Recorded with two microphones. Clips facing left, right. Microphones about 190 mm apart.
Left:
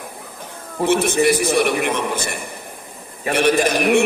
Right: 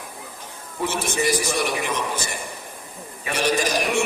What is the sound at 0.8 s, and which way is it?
A man's voice, 55° left (ahead or behind).